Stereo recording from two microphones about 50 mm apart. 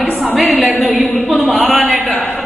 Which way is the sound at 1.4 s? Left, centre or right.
Left.